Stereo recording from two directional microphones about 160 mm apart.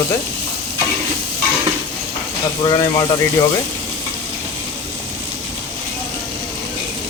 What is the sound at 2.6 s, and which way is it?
Speech, 25° left (ahead or behind).